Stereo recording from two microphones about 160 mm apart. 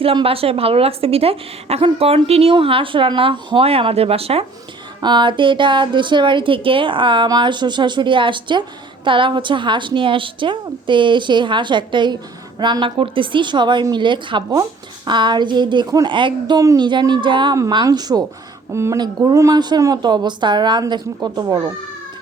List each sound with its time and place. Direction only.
0.0 s a woman's voice: 35° right (ahead or behind)